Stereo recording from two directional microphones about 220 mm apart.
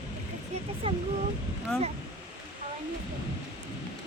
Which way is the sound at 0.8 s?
25° right (ahead or behind).